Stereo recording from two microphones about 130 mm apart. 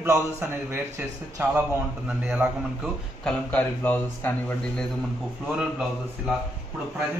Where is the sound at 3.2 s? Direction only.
15° left (ahead or behind).